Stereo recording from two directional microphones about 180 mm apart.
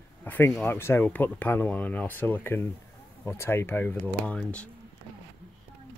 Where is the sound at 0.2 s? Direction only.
10° left (ahead or behind).